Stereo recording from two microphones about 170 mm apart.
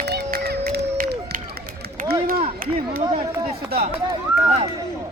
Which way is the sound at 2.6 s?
55° right (ahead or behind).